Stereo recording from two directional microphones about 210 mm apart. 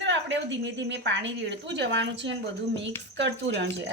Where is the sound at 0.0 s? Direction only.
55° right (ahead or behind).